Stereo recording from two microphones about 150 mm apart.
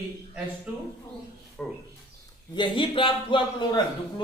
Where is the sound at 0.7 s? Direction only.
10° right (ahead or behind).